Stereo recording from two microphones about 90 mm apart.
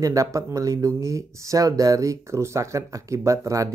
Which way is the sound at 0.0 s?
35° right (ahead or behind).